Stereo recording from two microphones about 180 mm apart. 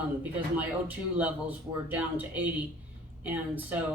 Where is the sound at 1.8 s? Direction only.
10° right (ahead or behind).